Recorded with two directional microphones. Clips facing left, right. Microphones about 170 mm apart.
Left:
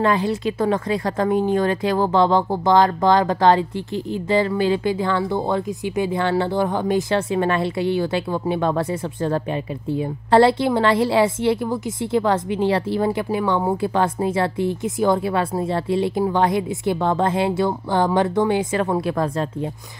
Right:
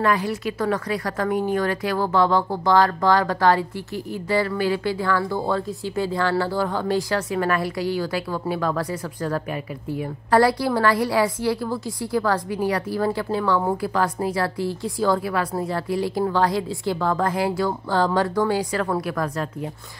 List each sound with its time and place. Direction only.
0.0 s a woman's voice: 25° left (ahead or behind)